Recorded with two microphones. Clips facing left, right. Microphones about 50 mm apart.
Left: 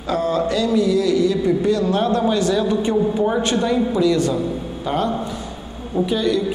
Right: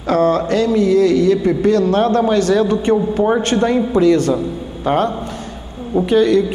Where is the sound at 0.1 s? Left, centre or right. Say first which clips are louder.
Right 5 dB; right.